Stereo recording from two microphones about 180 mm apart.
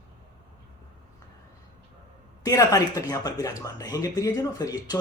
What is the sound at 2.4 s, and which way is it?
Speech, 20° left (ahead or behind).